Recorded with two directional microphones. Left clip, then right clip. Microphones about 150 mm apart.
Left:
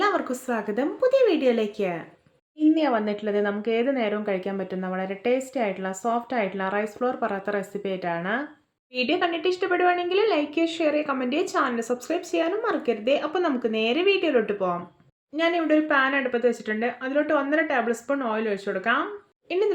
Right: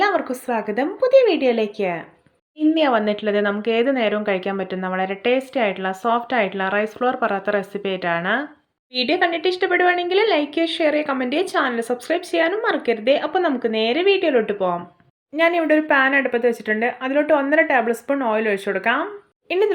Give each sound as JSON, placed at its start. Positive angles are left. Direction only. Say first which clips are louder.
{"t": 0.0, "sound": "a woman's voice", "louder": "right 5 dB", "side_deg": -10}